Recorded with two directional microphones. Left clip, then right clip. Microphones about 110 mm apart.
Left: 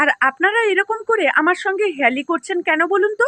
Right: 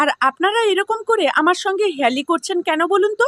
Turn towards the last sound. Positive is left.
turn(degrees=-25)  # may be behind; listen again after turning